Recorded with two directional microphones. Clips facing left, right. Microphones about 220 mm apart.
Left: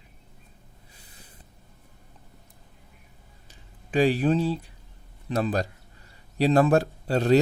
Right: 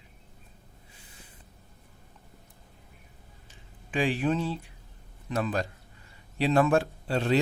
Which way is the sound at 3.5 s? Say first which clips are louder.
Left 5 dB; 40° left (ahead or behind).